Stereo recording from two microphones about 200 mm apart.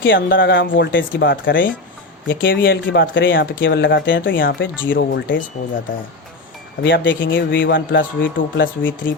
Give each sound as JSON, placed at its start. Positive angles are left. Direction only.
{"t": 0.0, "sound": "speech", "side_deg": 70}
{"t": 6.8, "sound": "speech", "side_deg": 65}